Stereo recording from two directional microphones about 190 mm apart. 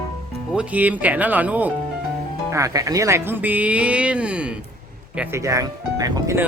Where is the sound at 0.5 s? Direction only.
5° right (ahead or behind).